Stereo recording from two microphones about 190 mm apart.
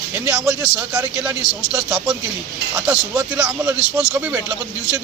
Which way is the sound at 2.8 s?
5° right (ahead or behind).